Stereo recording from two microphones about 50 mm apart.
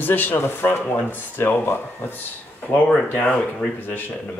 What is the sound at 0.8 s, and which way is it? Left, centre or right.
Speech, left.